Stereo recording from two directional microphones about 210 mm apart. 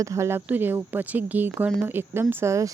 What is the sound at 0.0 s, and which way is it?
A woman's voice, 15° right (ahead or behind).